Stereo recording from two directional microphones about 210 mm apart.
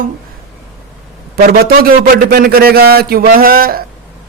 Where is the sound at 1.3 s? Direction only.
45° right (ahead or behind).